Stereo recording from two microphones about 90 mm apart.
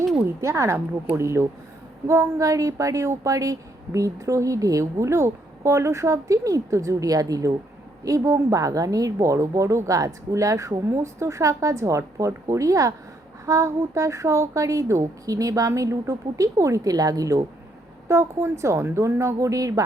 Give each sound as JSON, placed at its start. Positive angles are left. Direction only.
{"t": 0.4, "sound": "a woman's voice", "side_deg": -30}
{"t": 18.1, "sound": "a woman's voice", "side_deg": -30}